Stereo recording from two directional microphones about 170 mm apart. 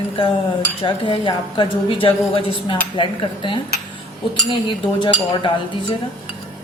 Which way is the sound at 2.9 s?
30° left (ahead or behind).